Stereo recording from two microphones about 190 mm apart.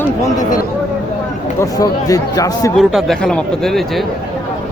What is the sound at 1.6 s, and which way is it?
A man's voice, 20° left (ahead or behind).